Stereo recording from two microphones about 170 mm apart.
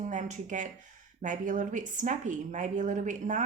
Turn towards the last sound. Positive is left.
turn(degrees=-45)  # may be behind; listen again after turning